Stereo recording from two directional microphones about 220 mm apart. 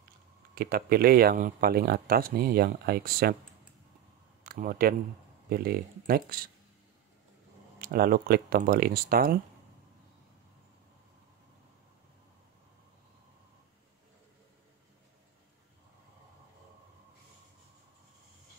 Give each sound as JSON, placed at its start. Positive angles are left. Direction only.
{"t": 0.6, "sound": "speech", "side_deg": -45}
{"t": 4.4, "sound": "speech", "side_deg": -40}
{"t": 7.8, "sound": "speech", "side_deg": -45}